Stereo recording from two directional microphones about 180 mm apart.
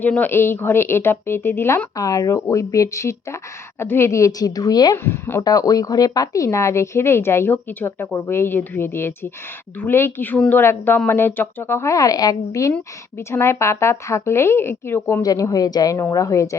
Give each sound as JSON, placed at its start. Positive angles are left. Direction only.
{"t": 0.0, "sound": "speech", "side_deg": 10}